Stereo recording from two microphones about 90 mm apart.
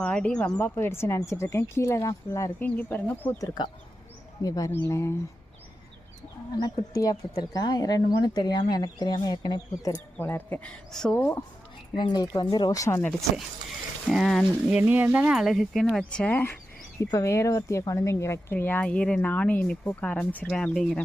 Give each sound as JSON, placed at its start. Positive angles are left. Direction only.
{"t": 0.0, "sound": "speech", "side_deg": 10}
{"t": 0.6, "sound": "speech", "side_deg": 25}
{"t": 2.6, "sound": "speech", "side_deg": 20}
{"t": 3.3, "sound": "speech", "side_deg": 40}
{"t": 4.7, "sound": "speech", "side_deg": 30}
{"t": 6.6, "sound": "speech", "side_deg": 40}
{"t": 10.2, "sound": "speech", "side_deg": 20}
{"t": 11.9, "sound": "speech", "side_deg": 55}
{"t": 12.7, "sound": "speech", "side_deg": 35}
{"t": 14.1, "sound": "speech", "side_deg": 0}
{"t": 14.7, "sound": "speech", "side_deg": -20}
{"t": 15.3, "sound": "speech", "side_deg": -5}
{"t": 17.0, "sound": "speech", "side_deg": 35}